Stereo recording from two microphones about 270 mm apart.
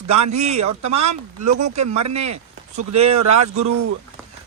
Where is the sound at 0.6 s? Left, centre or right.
Right.